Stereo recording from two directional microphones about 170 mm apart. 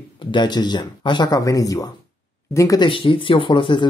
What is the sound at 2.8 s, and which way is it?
Speech, 30° left (ahead or behind).